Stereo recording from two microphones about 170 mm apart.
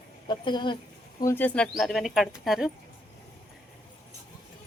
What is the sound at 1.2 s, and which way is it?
Speech, 15° left (ahead or behind).